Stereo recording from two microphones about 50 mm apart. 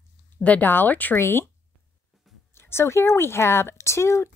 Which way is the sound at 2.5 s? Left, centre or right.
Left.